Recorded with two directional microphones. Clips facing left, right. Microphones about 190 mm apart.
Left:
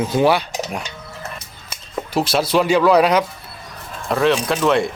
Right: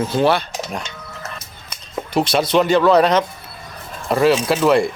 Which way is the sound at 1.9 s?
5° left (ahead or behind).